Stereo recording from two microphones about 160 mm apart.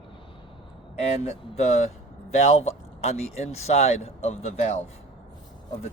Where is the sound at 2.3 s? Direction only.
40° left (ahead or behind).